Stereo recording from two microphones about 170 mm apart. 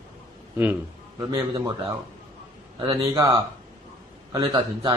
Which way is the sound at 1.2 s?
20° right (ahead or behind).